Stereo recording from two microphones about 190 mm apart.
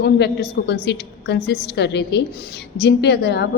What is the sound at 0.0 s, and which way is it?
A woman's voice, 60° left (ahead or behind).